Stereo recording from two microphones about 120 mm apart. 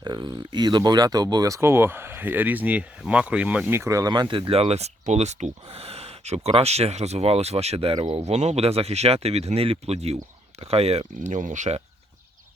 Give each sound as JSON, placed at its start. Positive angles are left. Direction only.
{"t": 0.0, "sound": "speech", "side_deg": -40}
{"t": 5.6, "sound": "speech", "side_deg": -55}